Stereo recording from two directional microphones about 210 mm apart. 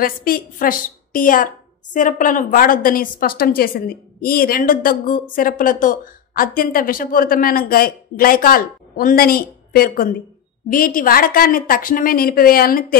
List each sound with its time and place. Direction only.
0.0 s a woman's voice: 45° left (ahead or behind)